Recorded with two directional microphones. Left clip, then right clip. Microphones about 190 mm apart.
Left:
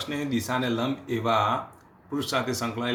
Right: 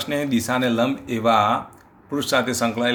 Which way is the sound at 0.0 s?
45° right (ahead or behind).